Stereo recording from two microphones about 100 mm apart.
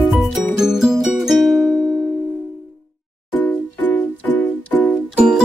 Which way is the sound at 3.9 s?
15° left (ahead or behind).